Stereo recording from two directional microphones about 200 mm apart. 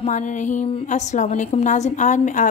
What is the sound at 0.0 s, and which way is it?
A woman's voice, 35° left (ahead or behind).